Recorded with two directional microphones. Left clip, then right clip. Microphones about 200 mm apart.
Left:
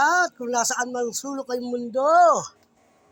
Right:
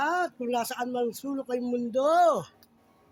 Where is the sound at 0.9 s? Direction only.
5° right (ahead or behind).